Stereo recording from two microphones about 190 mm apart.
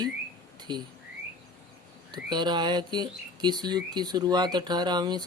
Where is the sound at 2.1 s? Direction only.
25° right (ahead or behind).